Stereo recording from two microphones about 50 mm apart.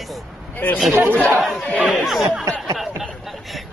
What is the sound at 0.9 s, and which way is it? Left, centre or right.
Speech, right.